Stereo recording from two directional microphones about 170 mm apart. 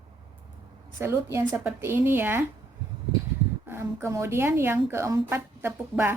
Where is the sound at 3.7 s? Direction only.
15° right (ahead or behind).